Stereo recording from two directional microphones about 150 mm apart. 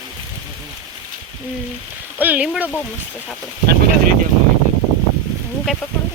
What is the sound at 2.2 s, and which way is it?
Speech, 10° right (ahead or behind).